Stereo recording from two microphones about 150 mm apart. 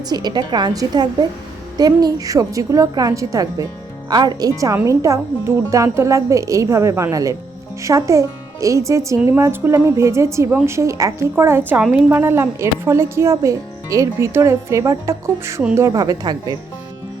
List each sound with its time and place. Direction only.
0.0 s speech: 25° right (ahead or behind)